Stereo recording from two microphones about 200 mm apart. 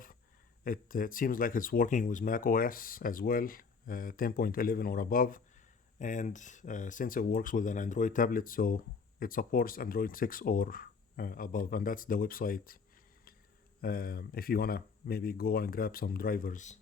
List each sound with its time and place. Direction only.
0.6 s speech: 45° left (ahead or behind)
13.8 s speech: 50° left (ahead or behind)